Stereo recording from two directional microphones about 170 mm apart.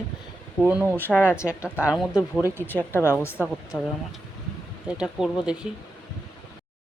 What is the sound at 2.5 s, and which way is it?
Speech, 10° left (ahead or behind).